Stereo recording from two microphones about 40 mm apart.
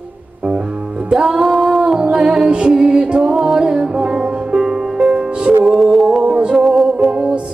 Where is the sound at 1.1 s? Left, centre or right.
Centre.